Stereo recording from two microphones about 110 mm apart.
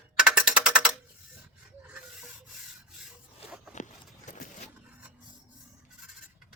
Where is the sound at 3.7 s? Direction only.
90° left.